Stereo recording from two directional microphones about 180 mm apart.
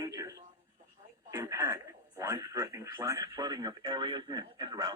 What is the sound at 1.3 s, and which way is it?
Speech, 15° right (ahead or behind).